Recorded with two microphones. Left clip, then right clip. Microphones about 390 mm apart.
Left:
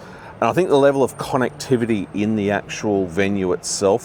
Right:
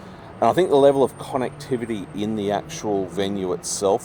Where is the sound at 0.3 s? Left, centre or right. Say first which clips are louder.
Left 1 dB; left.